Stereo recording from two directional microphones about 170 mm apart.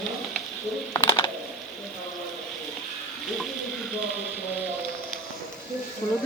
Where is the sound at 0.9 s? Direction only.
25° left (ahead or behind).